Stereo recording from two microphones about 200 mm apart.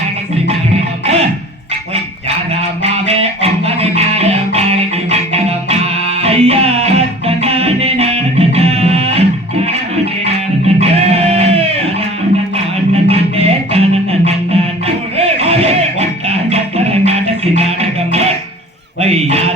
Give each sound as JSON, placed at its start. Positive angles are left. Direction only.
{"t": 1.0, "sound": "music", "side_deg": -30}
{"t": 2.6, "sound": "music", "side_deg": -30}
{"t": 10.8, "sound": "music", "side_deg": -30}
{"t": 13.1, "sound": "music", "side_deg": -30}
{"t": 18.9, "sound": "a sound", "side_deg": -30}